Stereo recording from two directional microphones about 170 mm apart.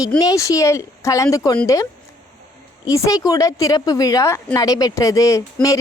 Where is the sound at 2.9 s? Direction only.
20° left (ahead or behind).